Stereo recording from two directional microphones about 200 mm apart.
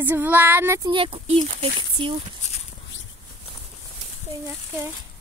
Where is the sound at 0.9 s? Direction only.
25° right (ahead or behind).